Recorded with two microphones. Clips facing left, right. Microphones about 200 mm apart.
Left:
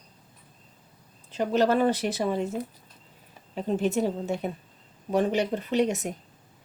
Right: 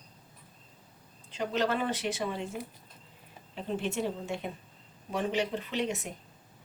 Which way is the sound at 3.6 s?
40° left (ahead or behind).